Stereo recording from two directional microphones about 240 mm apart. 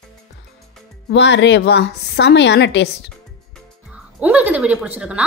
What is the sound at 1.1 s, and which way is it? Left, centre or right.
A woman's voice, left.